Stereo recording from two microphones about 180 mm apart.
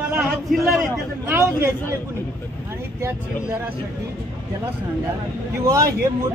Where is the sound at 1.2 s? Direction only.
15° right (ahead or behind).